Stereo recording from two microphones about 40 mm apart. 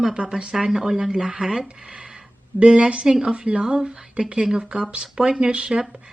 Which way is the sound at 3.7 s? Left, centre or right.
Centre.